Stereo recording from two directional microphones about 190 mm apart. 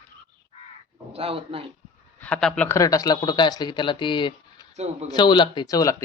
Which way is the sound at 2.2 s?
5° left (ahead or behind).